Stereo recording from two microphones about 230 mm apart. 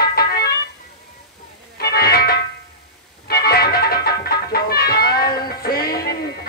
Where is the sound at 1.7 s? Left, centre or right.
Left.